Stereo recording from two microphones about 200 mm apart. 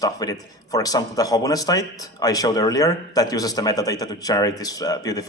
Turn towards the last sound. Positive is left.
turn(degrees=20)  # may be behind; listen again after turning